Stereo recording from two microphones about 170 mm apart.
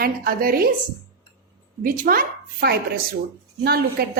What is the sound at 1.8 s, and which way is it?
Speech, 55° right (ahead or behind).